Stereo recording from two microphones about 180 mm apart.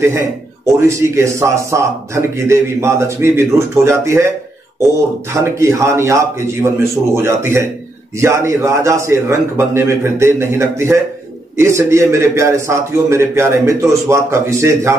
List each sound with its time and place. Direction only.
0.0 s a man's voice: 15° right (ahead or behind)
5.3 s a man's voice: 15° right (ahead or behind)